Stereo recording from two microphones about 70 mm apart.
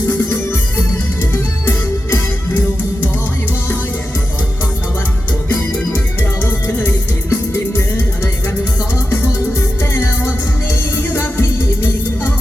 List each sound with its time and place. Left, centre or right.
1.2 s music: left
6.7 s music: left
9.6 s music: left